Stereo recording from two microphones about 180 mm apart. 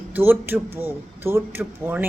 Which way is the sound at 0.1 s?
10° right (ahead or behind).